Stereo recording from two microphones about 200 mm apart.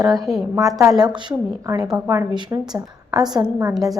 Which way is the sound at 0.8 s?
15° right (ahead or behind).